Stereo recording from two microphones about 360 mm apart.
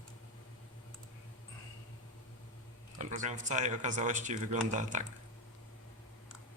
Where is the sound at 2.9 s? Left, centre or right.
Right.